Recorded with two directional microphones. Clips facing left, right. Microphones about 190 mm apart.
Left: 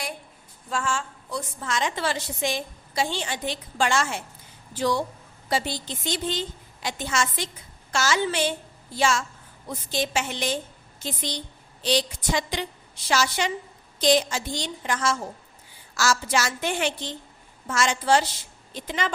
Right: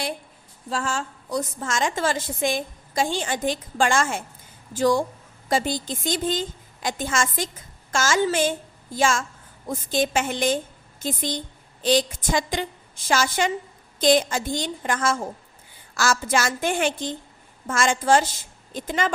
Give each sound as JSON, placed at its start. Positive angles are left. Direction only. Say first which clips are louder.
{"t": 0.7, "sound": "a woman's voice", "louder": "right 1 dB", "side_deg": -40}